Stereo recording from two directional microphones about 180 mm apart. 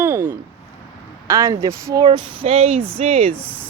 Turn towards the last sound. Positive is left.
turn(degrees=-10)  # may be behind; listen again after turning